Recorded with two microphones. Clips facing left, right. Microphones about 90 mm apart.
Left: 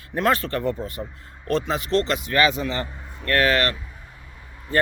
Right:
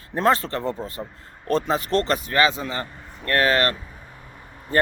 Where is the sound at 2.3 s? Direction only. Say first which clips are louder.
Left 2 dB; 25° right (ahead or behind).